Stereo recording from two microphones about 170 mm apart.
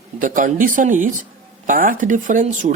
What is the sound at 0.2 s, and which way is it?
Speech, 50° right (ahead or behind).